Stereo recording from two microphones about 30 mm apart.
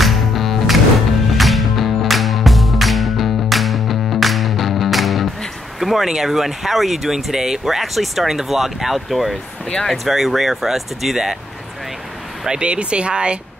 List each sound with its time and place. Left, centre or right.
0.0 s music: centre
5.8 s speech: centre
8.3 s speech: centre
12.4 s speech: right